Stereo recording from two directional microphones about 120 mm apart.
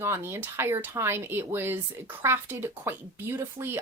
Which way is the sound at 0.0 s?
20° right (ahead or behind).